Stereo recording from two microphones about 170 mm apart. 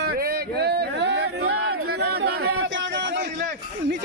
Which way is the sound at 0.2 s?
65° right (ahead or behind).